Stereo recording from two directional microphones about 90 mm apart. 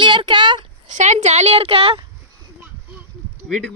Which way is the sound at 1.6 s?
90° right.